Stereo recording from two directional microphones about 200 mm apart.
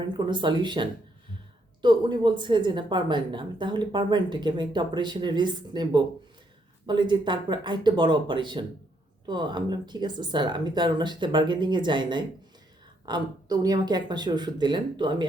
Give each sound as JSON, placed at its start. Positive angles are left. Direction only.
{"t": 0.3, "sound": "a woman's voice", "side_deg": -25}